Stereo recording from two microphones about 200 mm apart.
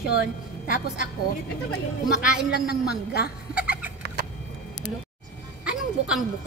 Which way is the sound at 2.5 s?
50° left (ahead or behind).